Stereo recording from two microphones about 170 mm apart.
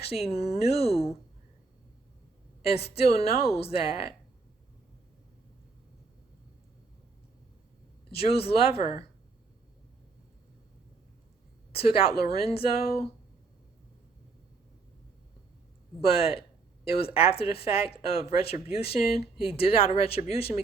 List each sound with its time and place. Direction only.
0.0 s speech: 35° left (ahead or behind)
2.6 s speech: 35° left (ahead or behind)
8.1 s speech: 35° left (ahead or behind)
11.7 s speech: 35° left (ahead or behind)
16.0 s speech: 35° left (ahead or behind)